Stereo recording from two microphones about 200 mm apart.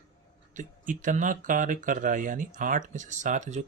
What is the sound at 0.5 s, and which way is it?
Speech, 40° right (ahead or behind).